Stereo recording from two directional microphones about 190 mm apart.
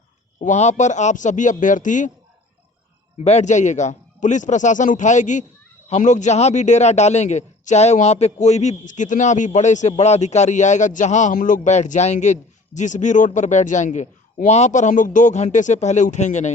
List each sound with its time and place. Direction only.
0.3 s a man's voice: 40° left (ahead or behind)
3.2 s a man's voice: 35° left (ahead or behind)